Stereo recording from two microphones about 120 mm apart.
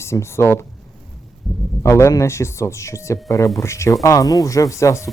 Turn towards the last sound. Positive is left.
turn(degrees=25)  # may be behind; listen again after turning